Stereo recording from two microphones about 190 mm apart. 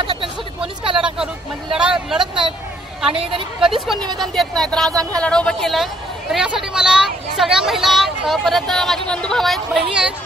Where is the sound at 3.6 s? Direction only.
Centre (ahead or behind).